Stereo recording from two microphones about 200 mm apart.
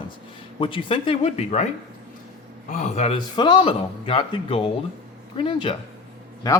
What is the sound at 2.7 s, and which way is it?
A man's voice, 35° left (ahead or behind).